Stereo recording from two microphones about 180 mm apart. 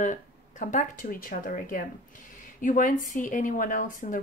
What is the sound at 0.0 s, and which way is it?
Speech, 45° left (ahead or behind).